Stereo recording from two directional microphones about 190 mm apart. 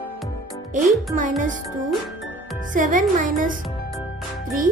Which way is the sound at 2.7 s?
45° right (ahead or behind).